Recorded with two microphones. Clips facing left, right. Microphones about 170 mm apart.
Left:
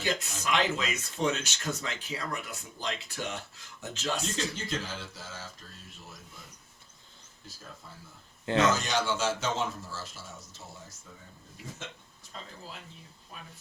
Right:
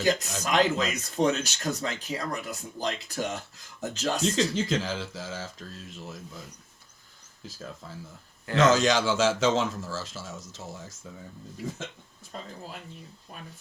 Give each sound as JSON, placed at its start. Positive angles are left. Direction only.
{"t": 0.0, "sound": "speech", "side_deg": -40}
{"t": 4.2, "sound": "a man's voice", "side_deg": -90}
{"t": 8.5, "sound": "a man's voice", "side_deg": -90}
{"t": 12.3, "sound": "speech", "side_deg": -50}